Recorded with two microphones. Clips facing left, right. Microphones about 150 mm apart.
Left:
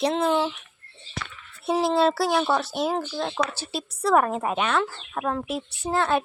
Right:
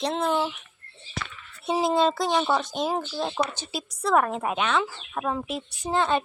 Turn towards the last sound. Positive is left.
turn(degrees=5)  # may be behind; listen again after turning